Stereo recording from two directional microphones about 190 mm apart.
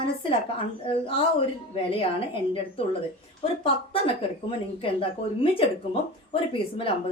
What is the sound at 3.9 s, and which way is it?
Speech, 30° left (ahead or behind).